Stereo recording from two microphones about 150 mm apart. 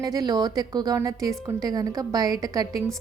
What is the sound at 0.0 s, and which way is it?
A woman's voice, 25° right (ahead or behind).